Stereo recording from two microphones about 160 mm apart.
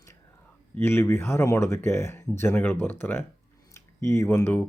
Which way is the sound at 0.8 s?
15° left (ahead or behind).